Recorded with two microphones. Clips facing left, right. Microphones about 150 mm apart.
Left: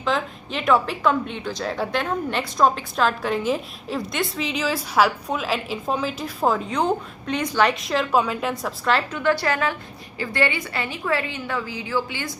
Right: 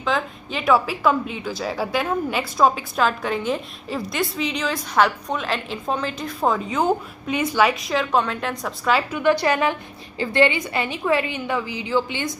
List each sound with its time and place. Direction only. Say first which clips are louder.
0.0 s a woman's voice: even; centre (ahead or behind)
9.2 s a woman's voice: right 4 dB; 15° right (ahead or behind)